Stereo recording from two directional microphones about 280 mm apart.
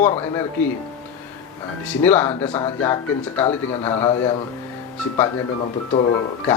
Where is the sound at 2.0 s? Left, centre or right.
Centre.